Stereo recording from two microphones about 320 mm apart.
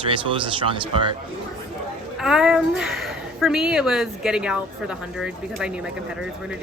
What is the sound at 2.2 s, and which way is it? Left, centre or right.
Speech, centre.